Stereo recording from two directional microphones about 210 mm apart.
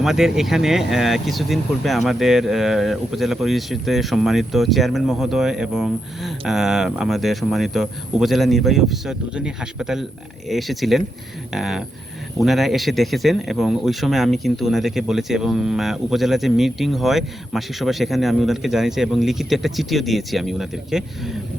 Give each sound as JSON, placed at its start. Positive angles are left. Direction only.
{"t": 0.0, "sound": "speech", "side_deg": 0}